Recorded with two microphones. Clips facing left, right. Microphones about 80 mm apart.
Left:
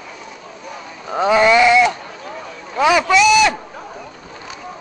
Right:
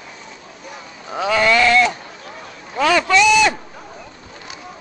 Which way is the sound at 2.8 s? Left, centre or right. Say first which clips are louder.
Left 2 dB; centre.